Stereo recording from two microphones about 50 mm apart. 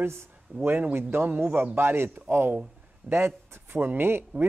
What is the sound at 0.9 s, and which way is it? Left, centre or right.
Speech, right.